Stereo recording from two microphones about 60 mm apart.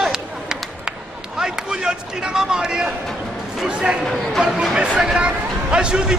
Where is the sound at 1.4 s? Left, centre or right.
Centre.